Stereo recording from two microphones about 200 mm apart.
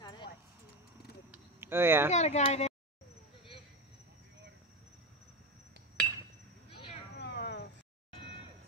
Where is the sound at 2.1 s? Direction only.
35° left (ahead or behind).